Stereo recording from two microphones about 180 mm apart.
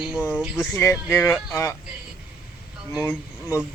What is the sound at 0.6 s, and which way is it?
Speech, 15° left (ahead or behind).